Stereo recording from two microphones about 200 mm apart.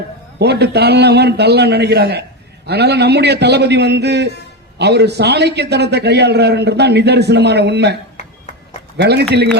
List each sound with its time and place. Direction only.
0.3 s a man's voice: 55° right (ahead or behind)
9.0 s a man's voice: 55° right (ahead or behind)